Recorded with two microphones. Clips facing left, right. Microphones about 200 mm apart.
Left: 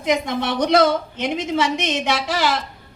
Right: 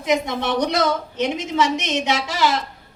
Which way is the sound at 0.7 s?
55° left (ahead or behind).